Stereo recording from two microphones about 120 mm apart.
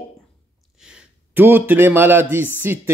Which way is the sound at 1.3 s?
15° right (ahead or behind).